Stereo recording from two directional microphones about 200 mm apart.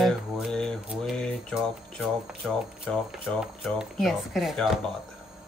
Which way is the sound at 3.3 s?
Centre (ahead or behind).